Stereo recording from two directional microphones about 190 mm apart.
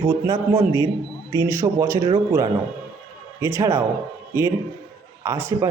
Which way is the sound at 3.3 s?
15° right (ahead or behind).